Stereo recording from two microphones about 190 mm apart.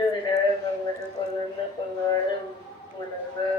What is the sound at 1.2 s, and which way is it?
Music, 20° left (ahead or behind).